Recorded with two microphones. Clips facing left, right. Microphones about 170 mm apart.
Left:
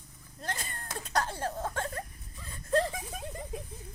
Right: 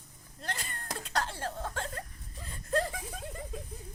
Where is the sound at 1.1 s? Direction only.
45° left (ahead or behind).